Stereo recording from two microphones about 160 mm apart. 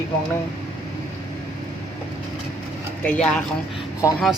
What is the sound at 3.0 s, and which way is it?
Speech, 5° left (ahead or behind).